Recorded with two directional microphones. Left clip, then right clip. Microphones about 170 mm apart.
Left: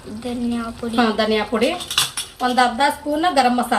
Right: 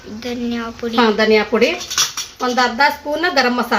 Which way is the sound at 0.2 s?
Centre (ahead or behind).